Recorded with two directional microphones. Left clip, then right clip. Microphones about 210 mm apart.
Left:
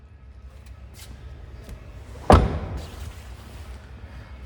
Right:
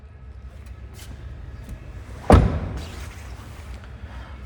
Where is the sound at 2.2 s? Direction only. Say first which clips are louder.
Left 1 dB; centre (ahead or behind).